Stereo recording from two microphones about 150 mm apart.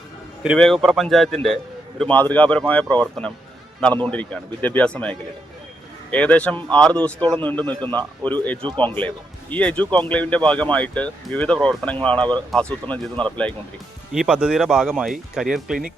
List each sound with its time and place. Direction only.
0.6 s speech: centre (ahead or behind)
7.2 s speech: 30° right (ahead or behind)
7.4 s speech: 10° left (ahead or behind)
14.1 s speech: 5° right (ahead or behind)